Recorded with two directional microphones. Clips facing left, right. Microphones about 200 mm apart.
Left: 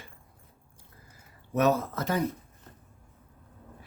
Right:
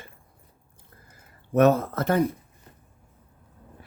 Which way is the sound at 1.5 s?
55° right (ahead or behind).